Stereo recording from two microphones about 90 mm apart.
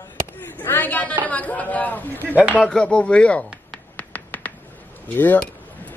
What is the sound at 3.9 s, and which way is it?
Finger snapping, 20° left (ahead or behind).